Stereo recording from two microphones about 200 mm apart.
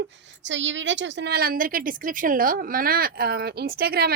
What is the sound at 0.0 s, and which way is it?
A woman's voice, 65° right (ahead or behind).